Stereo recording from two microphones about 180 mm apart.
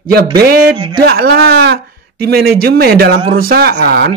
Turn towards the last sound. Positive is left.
turn(degrees=-60)  # may be behind; listen again after turning